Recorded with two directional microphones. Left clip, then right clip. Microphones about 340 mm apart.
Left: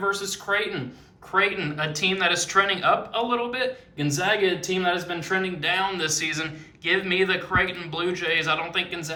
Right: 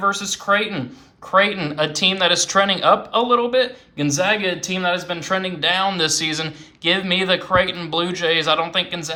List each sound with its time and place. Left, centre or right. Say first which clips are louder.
0.1 s speech: right 6 dB; centre